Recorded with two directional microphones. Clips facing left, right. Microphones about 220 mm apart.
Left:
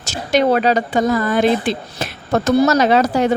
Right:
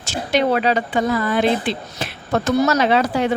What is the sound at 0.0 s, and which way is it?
A woman's voice, 45° left (ahead or behind).